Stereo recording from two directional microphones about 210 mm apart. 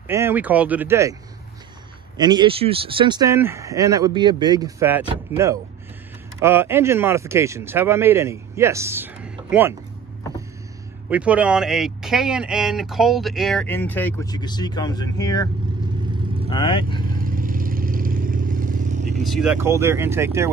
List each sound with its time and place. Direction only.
0.1 s speech: 10° right (ahead or behind)
2.1 s speech: 20° right (ahead or behind)
11.1 s speech: 5° right (ahead or behind); by 14.3 s 10° left (ahead or behind)
14.3 s speech: 20° left (ahead or behind)
16.4 s speech: 25° left (ahead or behind)
17.1 s vehicle: 40° right (ahead or behind)
19.2 s speech: centre (ahead or behind)